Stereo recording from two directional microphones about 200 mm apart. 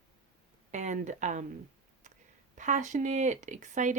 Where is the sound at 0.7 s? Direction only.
35° right (ahead or behind).